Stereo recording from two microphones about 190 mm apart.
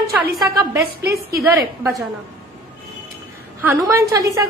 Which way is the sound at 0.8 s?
55° right (ahead or behind).